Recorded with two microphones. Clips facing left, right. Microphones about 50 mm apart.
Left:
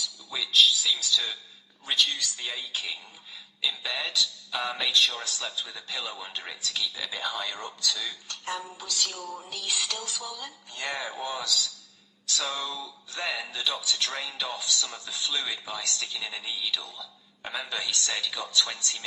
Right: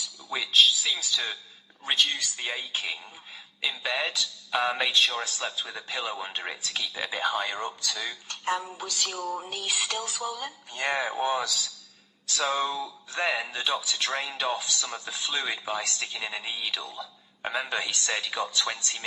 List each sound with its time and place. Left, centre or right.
0.0 s a man's voice: right